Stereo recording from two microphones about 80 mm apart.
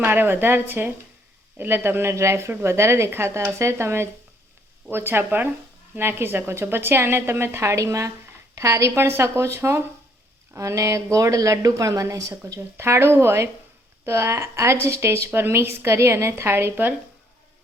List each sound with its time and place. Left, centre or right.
0.0 s a woman's voice: right